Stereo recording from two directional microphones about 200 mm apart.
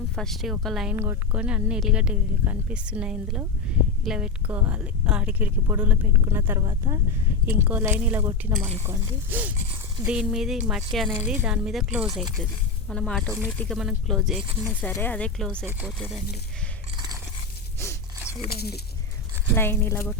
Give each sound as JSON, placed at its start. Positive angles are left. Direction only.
{"t": 0.2, "sound": "speech", "side_deg": 0}
{"t": 0.9, "sound": "speech", "side_deg": -10}
{"t": 14.7, "sound": "speech", "side_deg": 10}
{"t": 18.4, "sound": "speech", "side_deg": 50}
{"t": 19.5, "sound": "speech", "side_deg": 10}